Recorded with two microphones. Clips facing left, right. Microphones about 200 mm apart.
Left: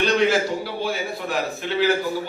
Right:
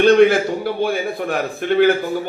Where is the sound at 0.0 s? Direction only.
55° right (ahead or behind).